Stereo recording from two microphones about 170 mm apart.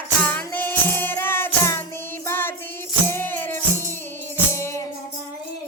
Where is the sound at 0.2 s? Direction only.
10° left (ahead or behind).